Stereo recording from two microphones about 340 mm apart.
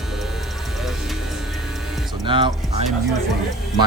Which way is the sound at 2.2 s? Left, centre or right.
Centre.